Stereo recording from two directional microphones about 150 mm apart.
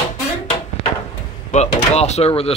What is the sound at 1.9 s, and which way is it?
Speech, 45° left (ahead or behind).